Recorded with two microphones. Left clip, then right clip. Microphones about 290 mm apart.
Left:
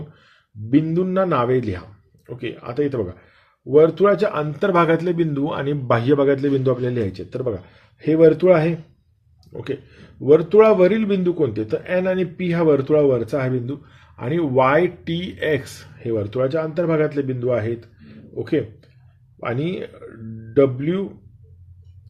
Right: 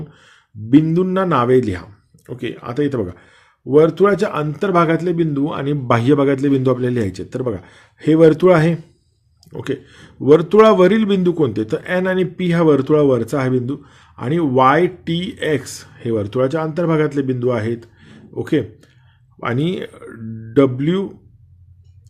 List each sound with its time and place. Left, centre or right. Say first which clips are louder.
0.3 s speech: right 6 dB; right